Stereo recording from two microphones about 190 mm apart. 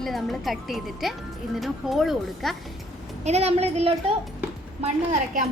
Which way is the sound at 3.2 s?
35° right (ahead or behind).